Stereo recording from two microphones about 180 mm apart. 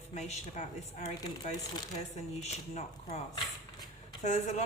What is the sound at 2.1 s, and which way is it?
Speech, 35° left (ahead or behind).